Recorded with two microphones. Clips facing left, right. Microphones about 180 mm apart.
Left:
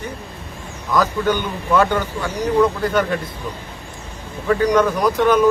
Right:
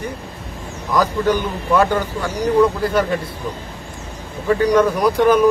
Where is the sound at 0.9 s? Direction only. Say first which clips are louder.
Right 1 dB; 35° right (ahead or behind).